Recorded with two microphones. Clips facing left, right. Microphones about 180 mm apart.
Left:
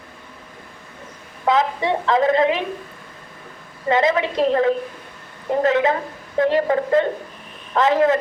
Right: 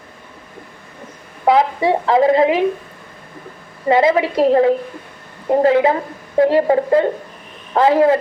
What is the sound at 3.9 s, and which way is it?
A woman's voice, 30° right (ahead or behind).